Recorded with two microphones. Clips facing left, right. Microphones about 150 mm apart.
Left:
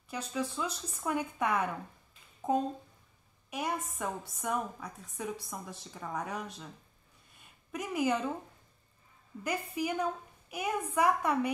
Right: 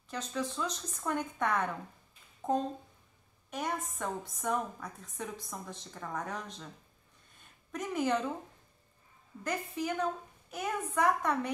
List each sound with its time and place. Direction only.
0.1 s a woman's voice: 10° left (ahead or behind)
7.3 s a sound: 5° left (ahead or behind)
9.4 s speech: 10° left (ahead or behind)